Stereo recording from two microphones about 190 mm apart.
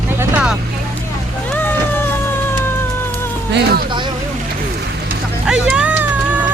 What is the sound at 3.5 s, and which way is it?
Insect, 60° right (ahead or behind).